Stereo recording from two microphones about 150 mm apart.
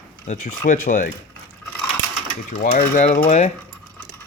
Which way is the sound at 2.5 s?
65° left (ahead or behind).